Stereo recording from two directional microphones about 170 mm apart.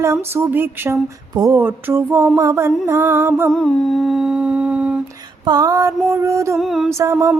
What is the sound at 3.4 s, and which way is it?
Humming, 5° left (ahead or behind).